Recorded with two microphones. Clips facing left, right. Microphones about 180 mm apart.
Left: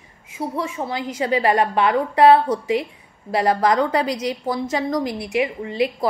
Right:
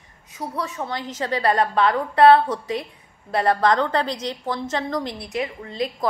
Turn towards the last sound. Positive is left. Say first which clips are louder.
# left 5 dB
turn(degrees=10)  # may be behind; listen again after turning